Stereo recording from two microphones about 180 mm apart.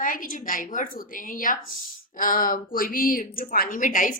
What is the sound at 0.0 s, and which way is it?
A woman's voice, 50° left (ahead or behind).